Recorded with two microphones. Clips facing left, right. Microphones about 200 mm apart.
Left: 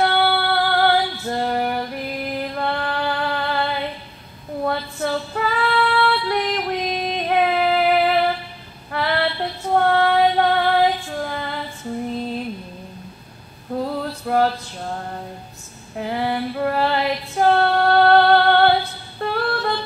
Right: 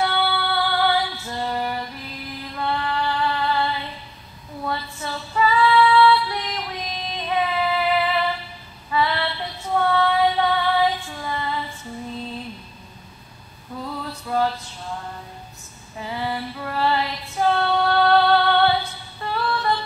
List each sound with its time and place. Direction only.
0.0 s female singing: 60° left (ahead or behind)
13.8 s male singing: 60° left (ahead or behind)
16.0 s female singing: 60° left (ahead or behind)